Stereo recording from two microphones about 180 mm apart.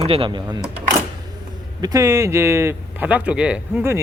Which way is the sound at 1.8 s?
20° right (ahead or behind).